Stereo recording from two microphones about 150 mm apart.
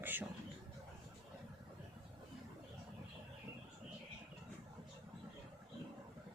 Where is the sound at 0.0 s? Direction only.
15° right (ahead or behind).